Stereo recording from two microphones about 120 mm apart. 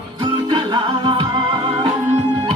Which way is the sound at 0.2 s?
40° right (ahead or behind).